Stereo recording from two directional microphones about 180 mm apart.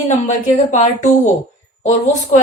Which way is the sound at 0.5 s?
40° left (ahead or behind).